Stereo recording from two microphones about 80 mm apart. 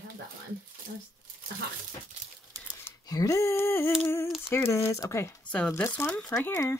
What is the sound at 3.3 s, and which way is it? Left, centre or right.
Speech, left.